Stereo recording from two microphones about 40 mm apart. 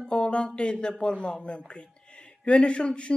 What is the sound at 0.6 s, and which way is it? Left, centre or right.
Speech, left.